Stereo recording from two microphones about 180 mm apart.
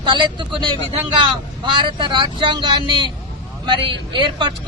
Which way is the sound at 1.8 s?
25° right (ahead or behind).